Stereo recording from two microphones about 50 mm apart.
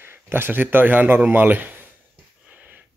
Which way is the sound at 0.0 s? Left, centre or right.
Right.